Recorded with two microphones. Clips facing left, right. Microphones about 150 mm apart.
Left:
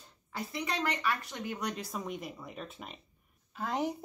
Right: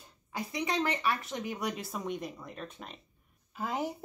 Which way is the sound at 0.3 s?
15° right (ahead or behind).